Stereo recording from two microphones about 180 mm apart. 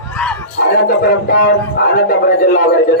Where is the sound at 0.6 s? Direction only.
60° left (ahead or behind).